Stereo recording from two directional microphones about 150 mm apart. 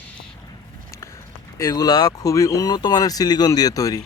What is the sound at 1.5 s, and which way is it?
Speech, 25° left (ahead or behind).